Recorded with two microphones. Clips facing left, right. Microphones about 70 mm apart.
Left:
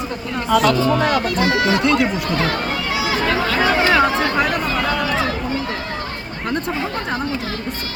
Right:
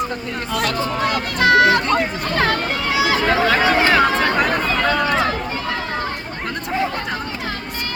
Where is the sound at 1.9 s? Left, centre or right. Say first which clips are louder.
Left 2 dB; right.